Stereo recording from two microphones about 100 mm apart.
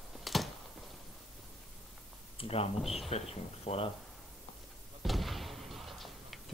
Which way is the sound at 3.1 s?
80° left.